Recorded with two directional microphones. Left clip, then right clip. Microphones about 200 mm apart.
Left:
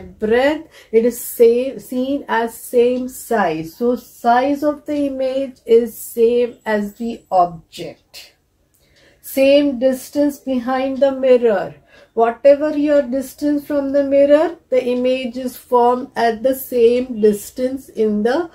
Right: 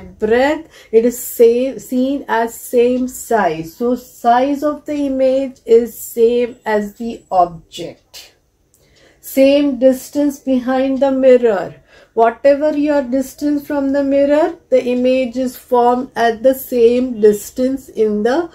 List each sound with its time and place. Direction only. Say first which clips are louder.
0.2 s speech: right 2 dB; 15° right (ahead or behind)
9.3 s speech: right 1 dB; 15° right (ahead or behind)